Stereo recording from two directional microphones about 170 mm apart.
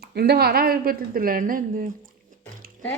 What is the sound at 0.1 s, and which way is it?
A woman's voice, 70° right (ahead or behind).